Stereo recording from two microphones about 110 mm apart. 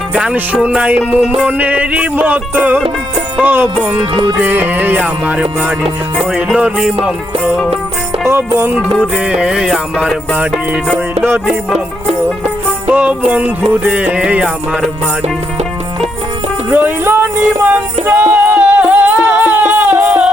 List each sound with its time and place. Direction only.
0.1 s music: 10° right (ahead or behind)
6.1 s music: centre (ahead or behind)
8.3 s music: 25° right (ahead or behind)
9.1 s music: 10° right (ahead or behind)
12.9 s music: 10° right (ahead or behind)
16.7 s music: 20° right (ahead or behind)